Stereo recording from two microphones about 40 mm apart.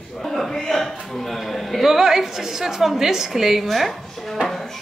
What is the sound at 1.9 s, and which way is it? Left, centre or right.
A woman's voice, centre.